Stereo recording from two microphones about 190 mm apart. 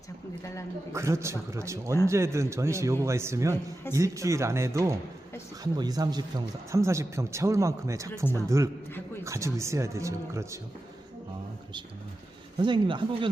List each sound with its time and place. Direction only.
0.9 s speech: 15° right (ahead or behind)
12.5 s speech: 25° right (ahead or behind)